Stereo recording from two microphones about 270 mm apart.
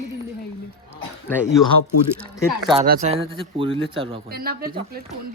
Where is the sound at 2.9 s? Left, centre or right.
Right.